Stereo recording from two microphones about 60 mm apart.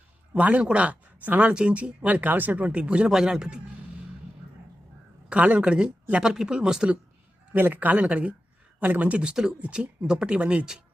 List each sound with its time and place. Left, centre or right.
0.3 s speech: right
5.3 s a woman's voice: right
7.5 s speech: right
9.3 s speech: centre
9.6 s speech: right